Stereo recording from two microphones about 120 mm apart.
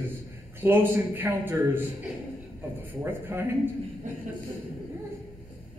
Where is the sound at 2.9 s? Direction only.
20° right (ahead or behind).